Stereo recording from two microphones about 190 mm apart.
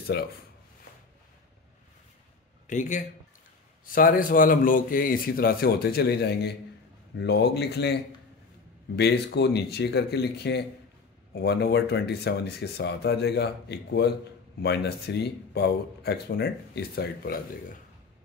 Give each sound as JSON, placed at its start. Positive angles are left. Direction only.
{"t": 0.1, "sound": "speech", "side_deg": 60}
{"t": 2.6, "sound": "a man's voice", "side_deg": 40}
{"t": 8.9, "sound": "speech", "side_deg": 60}